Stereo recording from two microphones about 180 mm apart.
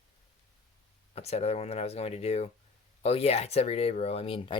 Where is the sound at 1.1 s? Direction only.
35° left (ahead or behind).